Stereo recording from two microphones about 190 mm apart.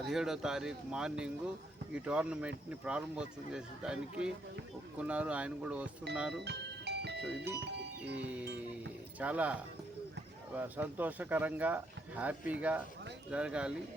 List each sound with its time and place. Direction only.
0.0 s speech: centre (ahead or behind)
6.4 s music: 60° right (ahead or behind)
8.2 s speech: 10° right (ahead or behind)